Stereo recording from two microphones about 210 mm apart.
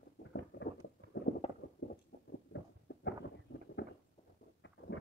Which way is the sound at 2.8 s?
55° left (ahead or behind).